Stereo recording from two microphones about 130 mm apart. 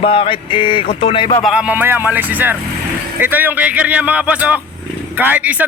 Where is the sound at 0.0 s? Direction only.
45° left (ahead or behind).